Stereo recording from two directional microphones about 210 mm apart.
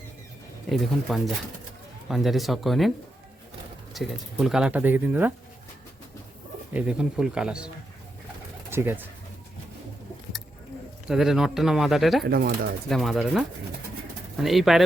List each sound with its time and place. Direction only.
0.7 s speech: centre (ahead or behind)
3.9 s speech: centre (ahead or behind)
6.7 s speech: 5° right (ahead or behind)
8.7 s speech: 10° right (ahead or behind)
11.1 s speech: centre (ahead or behind)
12.2 s speech: 45° right (ahead or behind)
12.9 s speech: centre (ahead or behind)
14.4 s speech: centre (ahead or behind)